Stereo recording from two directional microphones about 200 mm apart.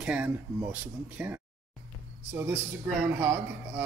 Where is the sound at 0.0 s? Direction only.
5° right (ahead or behind).